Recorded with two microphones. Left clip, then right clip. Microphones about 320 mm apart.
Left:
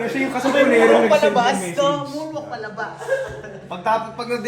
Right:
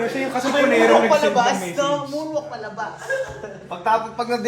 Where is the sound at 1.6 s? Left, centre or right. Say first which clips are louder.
Left 3 dB; centre.